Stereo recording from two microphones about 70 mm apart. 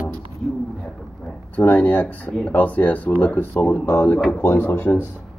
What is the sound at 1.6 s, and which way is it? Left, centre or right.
Speech, left.